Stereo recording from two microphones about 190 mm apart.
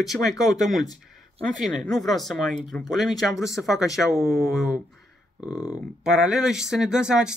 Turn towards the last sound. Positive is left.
turn(degrees=-5)  # may be behind; listen again after turning